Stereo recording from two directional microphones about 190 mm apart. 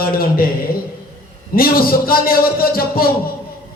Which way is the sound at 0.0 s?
50° left (ahead or behind).